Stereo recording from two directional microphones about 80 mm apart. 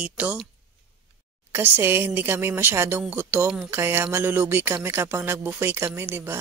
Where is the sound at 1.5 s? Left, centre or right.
Right.